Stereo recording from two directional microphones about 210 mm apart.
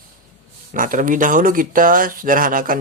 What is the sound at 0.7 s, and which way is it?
Speech, 40° right (ahead or behind).